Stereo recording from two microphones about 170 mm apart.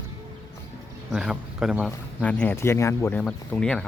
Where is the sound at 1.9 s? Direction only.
10° left (ahead or behind).